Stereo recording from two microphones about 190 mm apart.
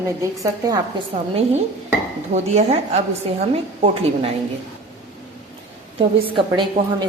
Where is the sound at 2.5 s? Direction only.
35° right (ahead or behind).